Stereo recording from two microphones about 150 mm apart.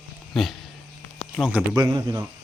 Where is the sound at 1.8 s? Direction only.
20° right (ahead or behind).